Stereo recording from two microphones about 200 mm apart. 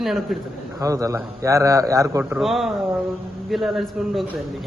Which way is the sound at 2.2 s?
5° right (ahead or behind).